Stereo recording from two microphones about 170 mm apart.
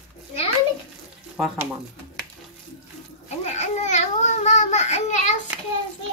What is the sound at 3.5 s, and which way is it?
Babbling, 40° left (ahead or behind).